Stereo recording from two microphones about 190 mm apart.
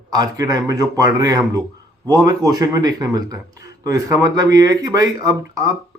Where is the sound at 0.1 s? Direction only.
20° right (ahead or behind).